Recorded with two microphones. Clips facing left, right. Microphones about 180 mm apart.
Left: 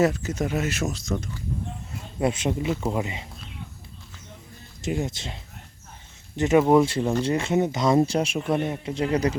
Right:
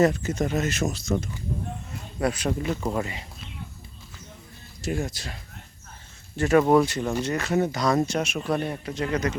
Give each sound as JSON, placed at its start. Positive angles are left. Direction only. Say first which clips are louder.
{"t": 0.0, "sound": "speech", "louder": "right 1 dB", "side_deg": 0}
{"t": 2.2, "sound": "speech", "louder": "left 1 dB", "side_deg": 25}
{"t": 2.6, "sound": "speech", "louder": "left 1 dB", "side_deg": 10}
{"t": 3.0, "sound": "speech", "louder": "left 1 dB", "side_deg": 20}
{"t": 4.8, "sound": "speech", "louder": "left 1 dB", "side_deg": 20}
{"t": 8.4, "sound": "speech", "louder": "left 2 dB", "side_deg": 20}